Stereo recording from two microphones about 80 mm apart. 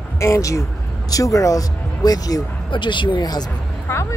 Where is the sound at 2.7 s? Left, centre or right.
Left.